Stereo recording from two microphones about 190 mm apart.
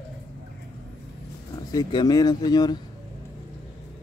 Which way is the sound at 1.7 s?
20° left (ahead or behind).